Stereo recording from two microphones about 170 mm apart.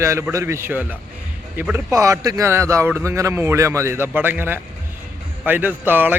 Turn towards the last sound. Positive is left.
turn(degrees=-10)  # may be behind; listen again after turning